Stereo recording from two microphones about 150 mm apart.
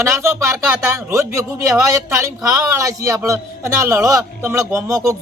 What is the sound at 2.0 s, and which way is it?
Speech, 20° right (ahead or behind).